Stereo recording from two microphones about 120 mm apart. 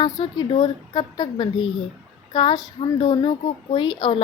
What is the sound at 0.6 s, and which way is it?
A child's voice, 40° left (ahead or behind).